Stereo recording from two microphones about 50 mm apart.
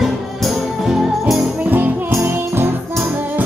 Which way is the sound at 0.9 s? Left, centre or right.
Centre.